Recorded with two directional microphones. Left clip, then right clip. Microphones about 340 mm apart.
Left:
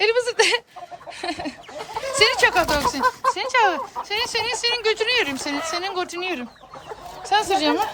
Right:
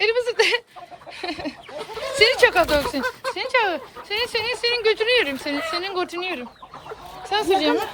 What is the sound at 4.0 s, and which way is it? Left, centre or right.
A woman's voice, centre.